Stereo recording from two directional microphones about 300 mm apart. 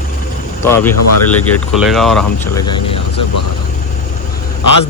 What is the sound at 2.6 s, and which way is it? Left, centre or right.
Speech, centre.